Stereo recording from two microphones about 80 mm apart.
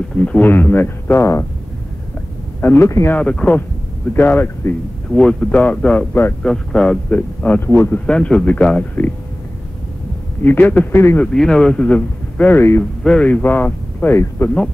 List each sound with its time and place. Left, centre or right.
0.1 s speech: centre; by 1.4 s left
2.6 s speech: left
3.2 s speech: centre
4.1 s speech: left
5.1 s speech: centre
6.4 s speech: centre
7.1 s speech: left
8.1 s speech: centre
10.4 s speech: left
11.3 s speech: centre
12.5 s speech: left
13.0 s speech: centre